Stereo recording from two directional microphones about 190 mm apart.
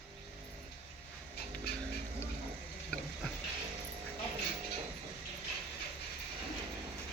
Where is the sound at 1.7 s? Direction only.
55° left (ahead or behind).